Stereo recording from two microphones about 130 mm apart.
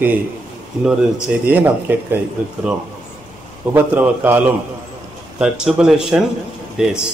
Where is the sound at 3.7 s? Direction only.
15° right (ahead or behind).